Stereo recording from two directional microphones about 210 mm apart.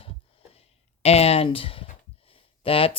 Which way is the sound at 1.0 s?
30° left (ahead or behind).